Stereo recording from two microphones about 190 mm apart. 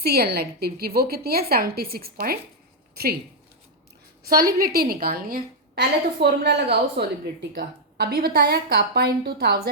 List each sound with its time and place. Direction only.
0.0 s a woman's voice: 55° right (ahead or behind)
4.3 s a woman's voice: 50° right (ahead or behind)